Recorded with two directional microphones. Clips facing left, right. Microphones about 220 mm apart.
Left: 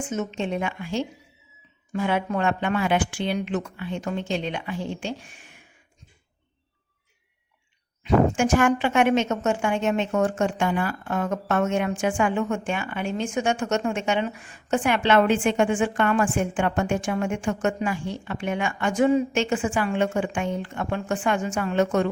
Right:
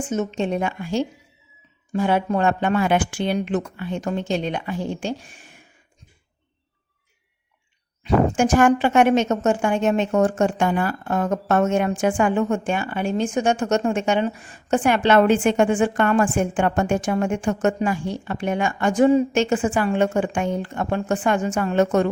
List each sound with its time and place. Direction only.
0.1 s a woman's voice: 35° right (ahead or behind)
8.0 s a woman's voice: 40° right (ahead or behind)